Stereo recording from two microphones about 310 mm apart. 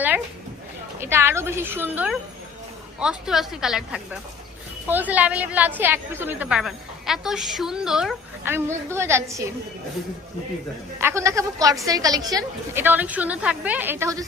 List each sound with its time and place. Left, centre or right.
1.0 s a woman's voice: centre
11.0 s a woman's voice: centre